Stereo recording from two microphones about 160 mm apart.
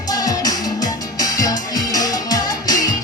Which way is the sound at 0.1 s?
25° left (ahead or behind).